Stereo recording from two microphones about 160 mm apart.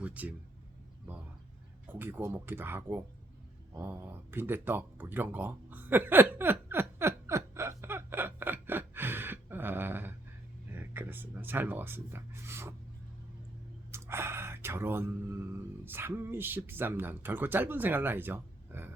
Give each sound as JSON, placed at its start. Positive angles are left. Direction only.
{"t": 0.0, "sound": "speech", "side_deg": -10}
{"t": 1.9, "sound": "speech", "side_deg": -10}
{"t": 3.8, "sound": "a sound", "side_deg": -15}
{"t": 10.7, "sound": "speech", "side_deg": -15}
{"t": 13.9, "sound": "a sound", "side_deg": -15}
{"t": 15.8, "sound": "speech", "side_deg": -15}